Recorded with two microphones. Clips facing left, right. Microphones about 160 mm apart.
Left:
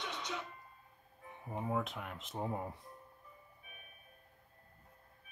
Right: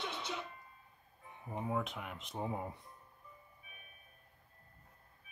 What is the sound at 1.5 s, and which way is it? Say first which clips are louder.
Speech: even; centre (ahead or behind).